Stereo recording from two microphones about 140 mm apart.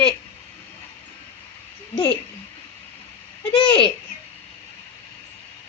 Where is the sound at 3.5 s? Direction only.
35° left (ahead or behind).